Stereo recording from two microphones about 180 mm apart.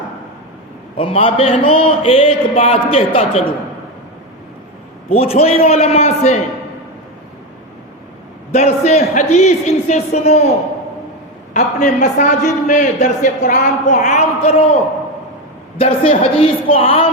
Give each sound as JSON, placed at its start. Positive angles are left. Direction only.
{"t": 0.9, "sound": "a man's voice", "side_deg": 30}
{"t": 5.0, "sound": "a man's voice", "side_deg": 35}
{"t": 8.5, "sound": "a man's voice", "side_deg": 40}
{"t": 11.5, "sound": "a man's voice", "side_deg": 40}
{"t": 15.8, "sound": "a man's voice", "side_deg": 35}